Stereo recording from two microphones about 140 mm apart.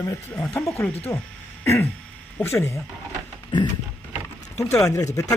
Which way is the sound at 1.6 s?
20° left (ahead or behind).